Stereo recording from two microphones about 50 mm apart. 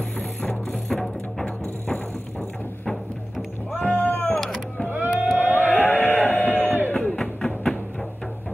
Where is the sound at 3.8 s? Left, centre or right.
Left.